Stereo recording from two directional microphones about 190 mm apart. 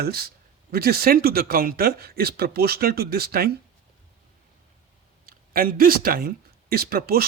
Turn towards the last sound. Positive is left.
turn(degrees=-50)  # may be behind; listen again after turning